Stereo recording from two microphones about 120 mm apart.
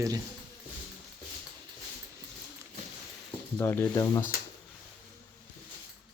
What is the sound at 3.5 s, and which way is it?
Speech, 20° left (ahead or behind).